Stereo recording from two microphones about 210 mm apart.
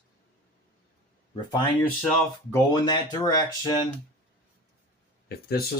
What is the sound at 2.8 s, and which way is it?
Speech, 20° left (ahead or behind).